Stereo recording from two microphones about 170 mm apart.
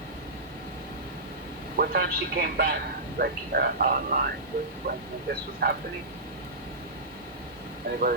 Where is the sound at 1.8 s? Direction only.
65° right (ahead or behind).